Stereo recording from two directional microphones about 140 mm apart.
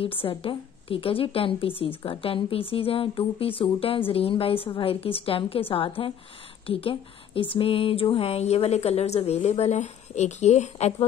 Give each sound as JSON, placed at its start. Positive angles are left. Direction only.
{"t": 0.0, "sound": "speech", "side_deg": 40}